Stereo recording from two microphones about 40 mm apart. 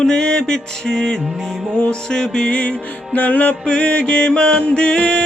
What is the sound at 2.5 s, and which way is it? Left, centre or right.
Music, left.